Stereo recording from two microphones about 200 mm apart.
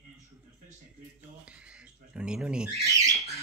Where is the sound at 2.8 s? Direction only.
15° right (ahead or behind).